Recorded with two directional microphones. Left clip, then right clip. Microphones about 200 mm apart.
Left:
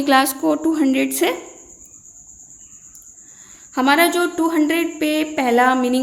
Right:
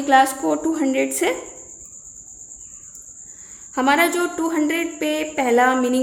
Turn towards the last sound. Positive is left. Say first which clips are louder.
# left 1 dB
turn(degrees=15)  # may be behind; listen again after turning